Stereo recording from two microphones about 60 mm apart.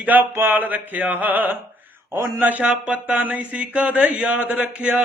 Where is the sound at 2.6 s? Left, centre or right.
Centre.